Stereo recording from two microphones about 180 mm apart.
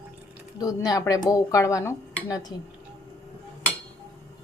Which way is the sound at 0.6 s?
20° left (ahead or behind).